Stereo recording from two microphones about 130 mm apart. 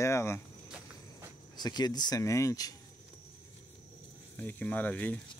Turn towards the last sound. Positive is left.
turn(degrees=10)  # may be behind; listen again after turning